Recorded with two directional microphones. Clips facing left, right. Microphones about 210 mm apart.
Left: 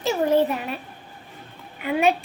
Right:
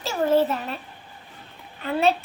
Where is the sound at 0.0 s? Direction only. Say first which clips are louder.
Left 1 dB; 15° left (ahead or behind).